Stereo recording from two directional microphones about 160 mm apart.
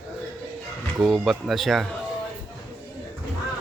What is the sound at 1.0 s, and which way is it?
Speech, centre (ahead or behind).